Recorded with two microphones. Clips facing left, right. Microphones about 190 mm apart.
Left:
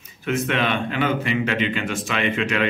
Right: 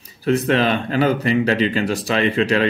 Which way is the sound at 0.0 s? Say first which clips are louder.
Right 5 dB; 35° right (ahead or behind).